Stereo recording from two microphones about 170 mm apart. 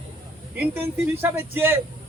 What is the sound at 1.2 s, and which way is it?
Speech, 15° right (ahead or behind).